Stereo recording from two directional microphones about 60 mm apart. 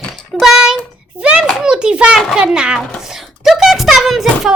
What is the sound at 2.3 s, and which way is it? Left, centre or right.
Speech, centre.